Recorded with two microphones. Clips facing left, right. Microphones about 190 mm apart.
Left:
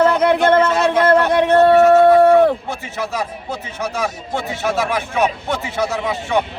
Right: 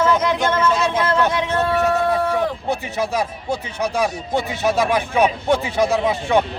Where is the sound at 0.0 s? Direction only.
60° left (ahead or behind).